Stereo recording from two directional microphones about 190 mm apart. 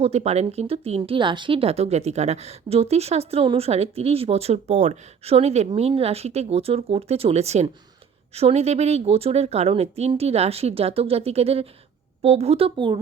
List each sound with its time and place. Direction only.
0.0 s speech: 35° right (ahead or behind)